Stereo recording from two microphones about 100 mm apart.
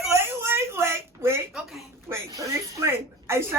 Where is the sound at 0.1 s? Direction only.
25° right (ahead or behind).